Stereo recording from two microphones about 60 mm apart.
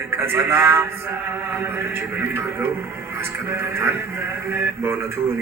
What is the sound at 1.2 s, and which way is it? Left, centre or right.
Speech, right.